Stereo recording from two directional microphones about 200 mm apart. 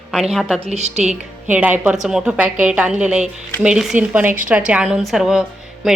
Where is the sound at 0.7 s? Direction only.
35° right (ahead or behind).